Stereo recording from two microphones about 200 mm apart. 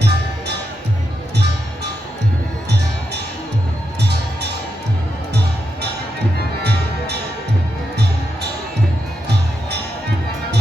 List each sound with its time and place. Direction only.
0.0 s music: 55° right (ahead or behind)
2.6 s music: 55° right (ahead or behind)
6.6 s music: 55° right (ahead or behind)